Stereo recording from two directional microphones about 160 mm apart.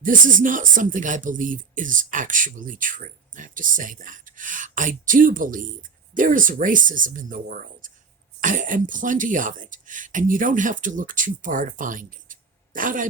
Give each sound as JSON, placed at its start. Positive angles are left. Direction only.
{"t": 0.0, "sound": "speech", "side_deg": -55}